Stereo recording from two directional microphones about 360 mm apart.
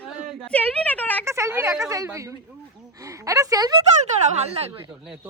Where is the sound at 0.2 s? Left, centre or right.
Centre.